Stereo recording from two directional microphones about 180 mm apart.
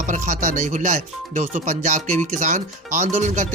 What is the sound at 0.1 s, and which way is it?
Speech, 40° right (ahead or behind).